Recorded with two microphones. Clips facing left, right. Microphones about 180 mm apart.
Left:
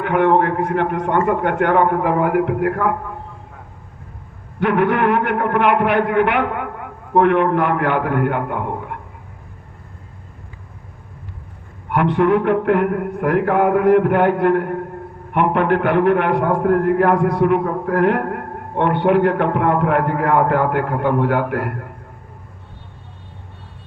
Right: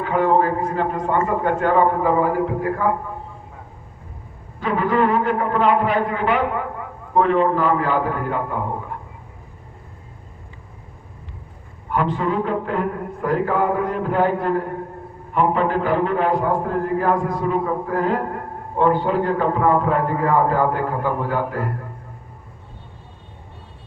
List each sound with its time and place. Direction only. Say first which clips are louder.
0.0 s a man's voice: left 2 dB; 70° left (ahead or behind)
4.6 s a man's voice: left 3 dB; 70° left (ahead or behind)
11.9 s a man's voice: left 6 dB; 70° left (ahead or behind)